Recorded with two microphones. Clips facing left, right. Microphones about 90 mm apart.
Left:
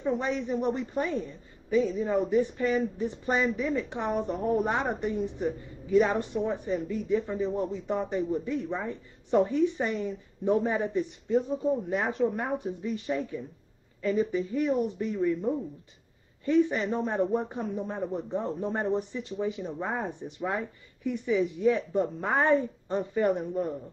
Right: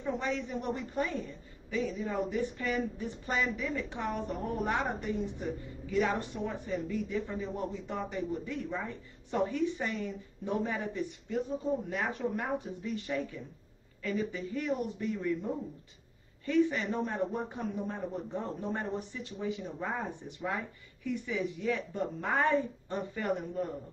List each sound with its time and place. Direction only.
0.0 s a woman's voice: 25° left (ahead or behind)